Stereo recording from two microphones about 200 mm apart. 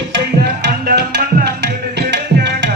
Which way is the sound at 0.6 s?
55° right (ahead or behind).